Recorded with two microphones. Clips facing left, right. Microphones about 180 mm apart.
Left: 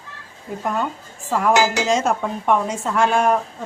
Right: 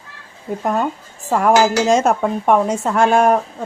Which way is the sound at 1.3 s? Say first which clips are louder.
Right 4 dB; 50° right (ahead or behind).